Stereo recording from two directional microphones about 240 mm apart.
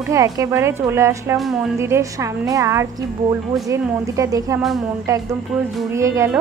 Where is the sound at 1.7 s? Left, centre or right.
Centre.